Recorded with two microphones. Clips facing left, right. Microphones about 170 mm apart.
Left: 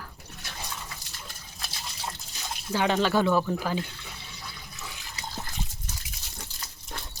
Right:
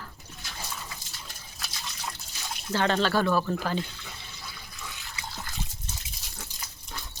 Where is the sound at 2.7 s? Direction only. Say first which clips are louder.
Left 1 dB; 10° left (ahead or behind).